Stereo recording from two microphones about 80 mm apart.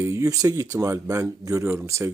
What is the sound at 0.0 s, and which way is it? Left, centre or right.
Speech, right.